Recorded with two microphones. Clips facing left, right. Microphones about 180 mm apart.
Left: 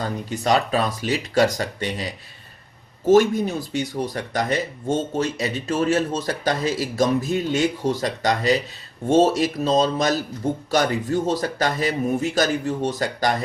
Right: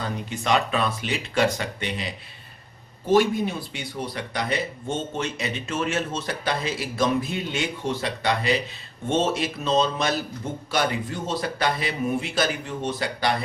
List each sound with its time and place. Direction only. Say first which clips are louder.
0.0 s a man's voice: left 4 dB; 40° left (ahead or behind)